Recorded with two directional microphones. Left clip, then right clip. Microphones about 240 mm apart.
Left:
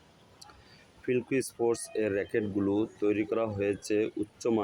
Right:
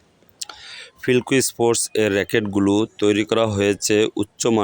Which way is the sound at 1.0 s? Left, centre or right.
Right.